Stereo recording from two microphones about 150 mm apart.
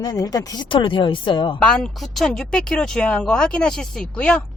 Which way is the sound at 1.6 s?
5° left (ahead or behind).